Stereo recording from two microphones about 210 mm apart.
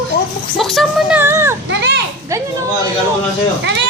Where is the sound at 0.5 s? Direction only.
Centre (ahead or behind).